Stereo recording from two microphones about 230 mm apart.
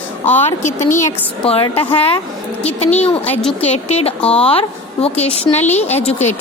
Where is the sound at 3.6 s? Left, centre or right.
Left.